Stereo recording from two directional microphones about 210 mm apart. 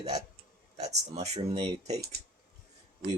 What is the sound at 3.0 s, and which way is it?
Speech, 45° right (ahead or behind).